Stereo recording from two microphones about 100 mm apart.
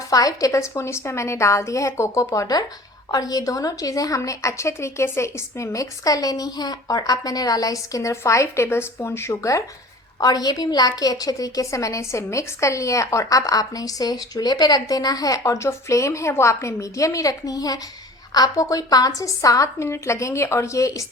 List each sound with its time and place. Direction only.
0.1 s a woman's voice: 35° left (ahead or behind)